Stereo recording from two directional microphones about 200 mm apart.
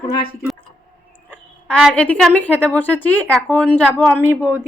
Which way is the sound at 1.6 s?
5° left (ahead or behind).